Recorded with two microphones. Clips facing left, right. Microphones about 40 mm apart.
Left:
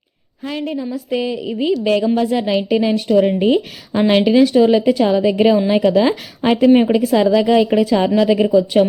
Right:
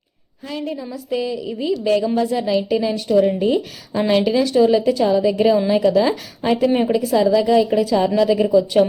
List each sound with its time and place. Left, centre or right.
0.4 s a woman's voice: left
0.8 s a woman's voice: left
4.2 s a woman's voice: left